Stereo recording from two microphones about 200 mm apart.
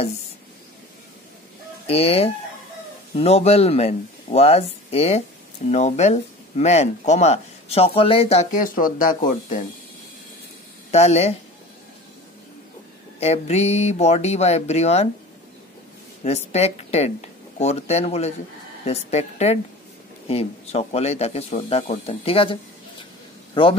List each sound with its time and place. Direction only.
1.9 s speech: 30° left (ahead or behind)
10.9 s speech: 30° left (ahead or behind)
13.2 s speech: 35° left (ahead or behind)
16.3 s a man's voice: 30° left (ahead or behind)